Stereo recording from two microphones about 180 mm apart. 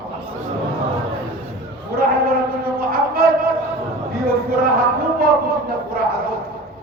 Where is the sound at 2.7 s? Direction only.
55° right (ahead or behind).